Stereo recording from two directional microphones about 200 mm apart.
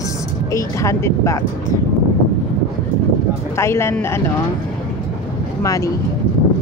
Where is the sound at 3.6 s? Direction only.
15° left (ahead or behind).